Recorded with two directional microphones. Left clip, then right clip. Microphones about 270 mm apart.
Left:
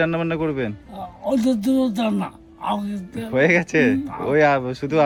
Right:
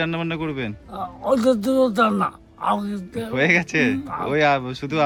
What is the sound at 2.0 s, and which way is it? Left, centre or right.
Speech, right.